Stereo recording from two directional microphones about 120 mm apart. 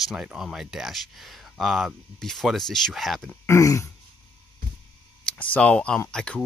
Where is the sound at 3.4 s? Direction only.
25° left (ahead or behind).